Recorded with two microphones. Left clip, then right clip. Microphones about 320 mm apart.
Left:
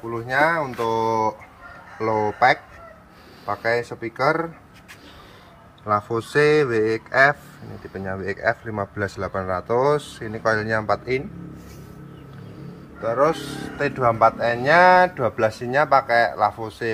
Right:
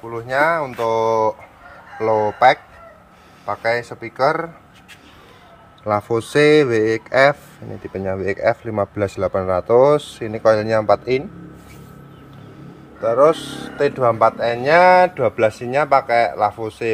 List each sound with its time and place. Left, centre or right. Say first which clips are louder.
0.1 s speech: right 2 dB; centre
5.9 s speech: right 3 dB; right
13.0 s speech: right 6 dB; right
15.0 s speech: right 3 dB; right